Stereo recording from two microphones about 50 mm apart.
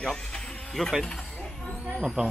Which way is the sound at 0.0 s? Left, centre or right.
Centre.